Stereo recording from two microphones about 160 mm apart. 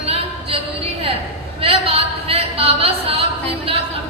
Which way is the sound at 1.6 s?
35° right (ahead or behind).